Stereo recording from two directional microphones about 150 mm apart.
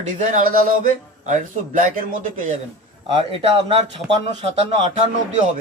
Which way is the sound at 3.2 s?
40° right (ahead or behind).